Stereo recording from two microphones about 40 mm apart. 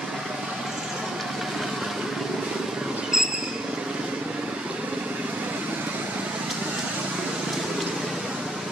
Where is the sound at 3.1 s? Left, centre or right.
Centre.